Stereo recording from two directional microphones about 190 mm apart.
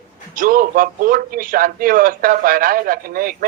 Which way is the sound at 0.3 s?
50° right (ahead or behind).